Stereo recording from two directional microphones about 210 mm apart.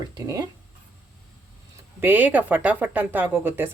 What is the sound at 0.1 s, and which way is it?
Speech, 15° right (ahead or behind).